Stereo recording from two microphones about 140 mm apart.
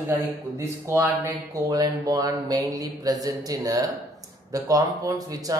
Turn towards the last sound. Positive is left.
turn(degrees=-25)  # may be behind; listen again after turning